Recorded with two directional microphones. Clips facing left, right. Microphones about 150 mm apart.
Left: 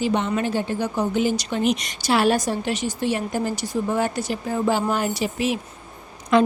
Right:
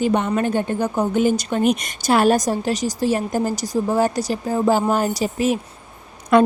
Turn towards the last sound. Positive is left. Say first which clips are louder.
# right 3 dB
turn(degrees=-55)  # may be behind; listen again after turning